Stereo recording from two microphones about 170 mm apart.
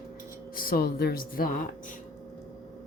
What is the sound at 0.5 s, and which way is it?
Speech, 60° left (ahead or behind).